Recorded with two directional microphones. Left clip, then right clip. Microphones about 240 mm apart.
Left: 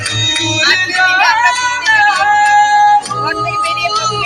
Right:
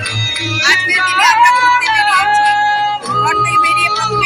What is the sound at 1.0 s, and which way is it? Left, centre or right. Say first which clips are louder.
Music: left 1 dB; left.